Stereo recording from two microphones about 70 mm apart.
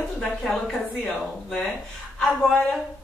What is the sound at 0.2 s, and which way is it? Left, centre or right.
Speech, centre.